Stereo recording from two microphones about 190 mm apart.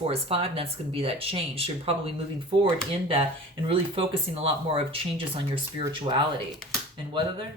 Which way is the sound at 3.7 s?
30° right (ahead or behind).